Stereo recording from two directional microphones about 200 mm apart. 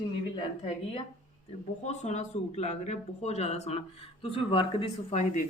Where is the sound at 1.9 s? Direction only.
35° left (ahead or behind).